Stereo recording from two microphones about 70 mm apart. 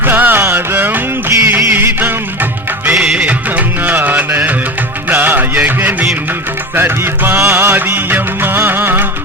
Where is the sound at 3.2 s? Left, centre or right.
Right.